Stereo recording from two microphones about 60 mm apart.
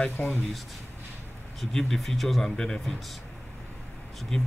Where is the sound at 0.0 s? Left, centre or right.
Centre.